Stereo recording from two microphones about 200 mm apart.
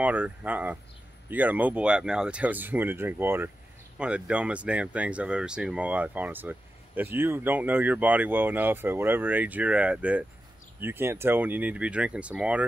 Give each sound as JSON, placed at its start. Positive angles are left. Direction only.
{"t": 0.0, "sound": "speech", "side_deg": -5}